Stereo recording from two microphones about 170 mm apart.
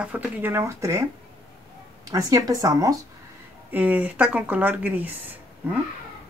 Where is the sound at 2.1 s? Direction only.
20° right (ahead or behind).